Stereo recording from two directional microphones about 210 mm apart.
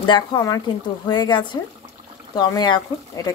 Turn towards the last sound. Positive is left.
turn(degrees=15)  # may be behind; listen again after turning